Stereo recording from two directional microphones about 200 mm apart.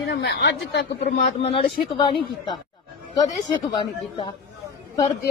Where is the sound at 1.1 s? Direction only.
35° left (ahead or behind).